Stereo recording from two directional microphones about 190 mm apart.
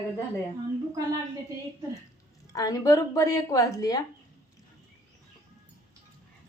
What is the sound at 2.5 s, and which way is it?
A woman's voice, 20° left (ahead or behind).